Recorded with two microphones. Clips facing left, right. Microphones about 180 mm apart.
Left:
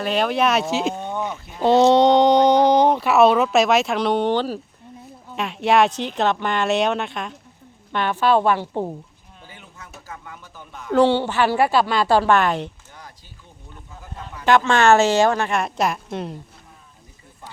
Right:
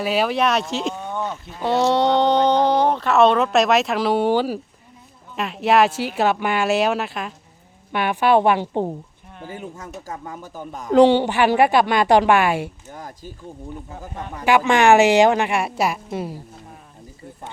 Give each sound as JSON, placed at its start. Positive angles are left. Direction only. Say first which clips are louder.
{"t": 0.0, "sound": "speech", "louder": "even", "side_deg": -5}
{"t": 1.1, "sound": "a woman's voice", "louder": "even", "side_deg": 15}
{"t": 9.4, "sound": "speech", "louder": "right 11 dB", "side_deg": -45}
{"t": 10.9, "sound": "a woman's voice", "louder": "right 3 dB", "side_deg": -15}
{"t": 12.9, "sound": "speech", "louder": "right 9 dB", "side_deg": -45}
{"t": 14.4, "sound": "a woman's voice", "louder": "right 1 dB", "side_deg": -10}